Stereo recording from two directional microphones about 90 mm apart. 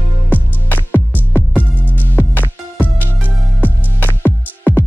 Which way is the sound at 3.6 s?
20° left (ahead or behind).